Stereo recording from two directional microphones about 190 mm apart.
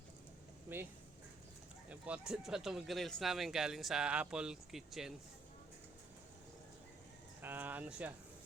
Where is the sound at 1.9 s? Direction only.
5° right (ahead or behind).